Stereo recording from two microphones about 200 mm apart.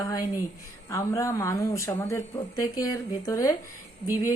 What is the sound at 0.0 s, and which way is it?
Speech, 15° left (ahead or behind).